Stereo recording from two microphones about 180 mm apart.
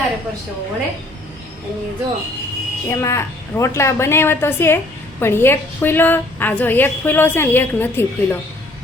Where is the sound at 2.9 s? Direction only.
15° left (ahead or behind).